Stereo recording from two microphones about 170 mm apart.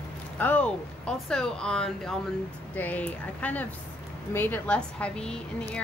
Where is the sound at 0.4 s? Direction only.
10° left (ahead or behind).